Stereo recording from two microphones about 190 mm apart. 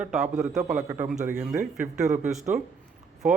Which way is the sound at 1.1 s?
40° right (ahead or behind).